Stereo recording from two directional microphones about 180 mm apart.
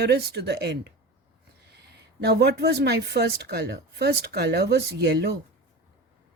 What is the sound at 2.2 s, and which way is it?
Speech, 65° right (ahead or behind).